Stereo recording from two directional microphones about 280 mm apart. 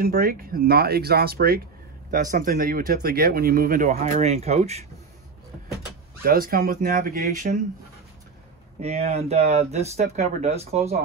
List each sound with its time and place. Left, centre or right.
0.0 s speech: right
6.2 s speech: right
8.8 s speech: right